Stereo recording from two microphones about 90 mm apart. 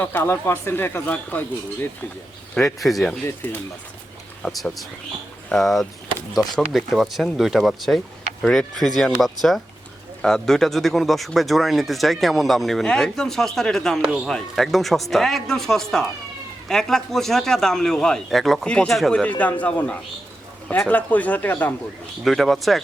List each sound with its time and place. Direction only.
0.0 s speech: 25° left (ahead or behind)
2.6 s speech: 5° left (ahead or behind)
4.4 s speech: 5° left (ahead or behind)
18.6 s speech: 10° left (ahead or behind)
19.4 s speech: 15° left (ahead or behind)
22.2 s speech: centre (ahead or behind)